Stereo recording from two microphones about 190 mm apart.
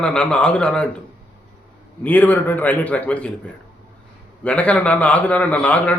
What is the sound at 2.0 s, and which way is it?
A man's voice, 10° left (ahead or behind).